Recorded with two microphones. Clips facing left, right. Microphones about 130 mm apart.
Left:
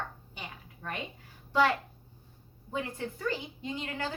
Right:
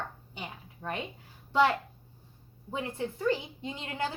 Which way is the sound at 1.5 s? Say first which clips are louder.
Right 1 dB; 20° right (ahead or behind).